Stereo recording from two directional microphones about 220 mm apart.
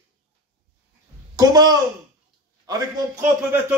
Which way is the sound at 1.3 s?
20° right (ahead or behind).